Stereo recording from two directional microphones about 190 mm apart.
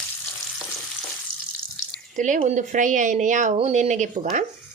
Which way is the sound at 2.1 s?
40° right (ahead or behind).